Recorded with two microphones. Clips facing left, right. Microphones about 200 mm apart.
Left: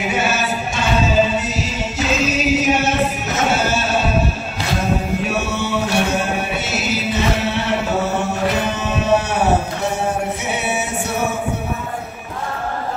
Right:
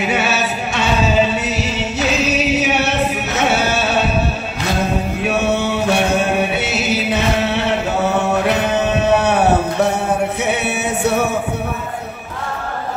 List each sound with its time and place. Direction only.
0.1 s music: 65° right (ahead or behind)
1.6 s singing: 65° right (ahead or behind)
5.4 s a sound: 60° right (ahead or behind)
6.6 s music: 60° right (ahead or behind)
8.3 s a sound: 60° right (ahead or behind)
10.4 s music: 60° right (ahead or behind)